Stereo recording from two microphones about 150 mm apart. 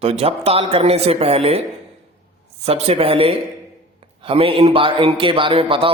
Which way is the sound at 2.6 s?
45° right (ahead or behind).